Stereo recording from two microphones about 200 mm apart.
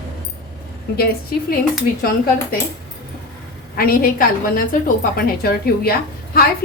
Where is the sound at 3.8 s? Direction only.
45° left (ahead or behind).